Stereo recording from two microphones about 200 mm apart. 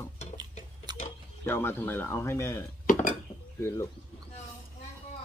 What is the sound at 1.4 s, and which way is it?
Speech, 10° left (ahead or behind).